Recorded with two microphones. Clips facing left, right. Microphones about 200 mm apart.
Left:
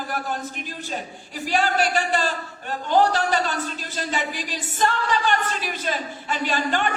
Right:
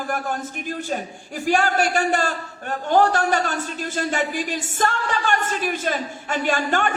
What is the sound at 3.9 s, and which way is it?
A man's voice, 50° right (ahead or behind).